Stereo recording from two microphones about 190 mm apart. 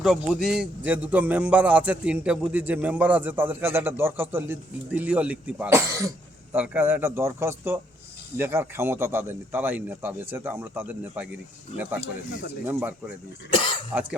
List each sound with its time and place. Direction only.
0.0 s a man's voice: centre (ahead or behind)
12.6 s a man's voice: 10° right (ahead or behind)
13.5 s speech: 25° left (ahead or behind)